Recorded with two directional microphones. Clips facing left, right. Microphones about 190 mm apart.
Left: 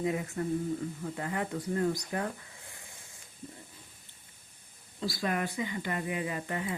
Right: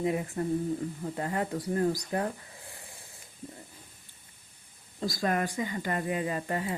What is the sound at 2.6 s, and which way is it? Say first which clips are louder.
Hiss: right 6 dB; 35° right (ahead or behind).